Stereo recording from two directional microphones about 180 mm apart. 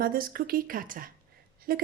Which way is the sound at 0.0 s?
55° right (ahead or behind).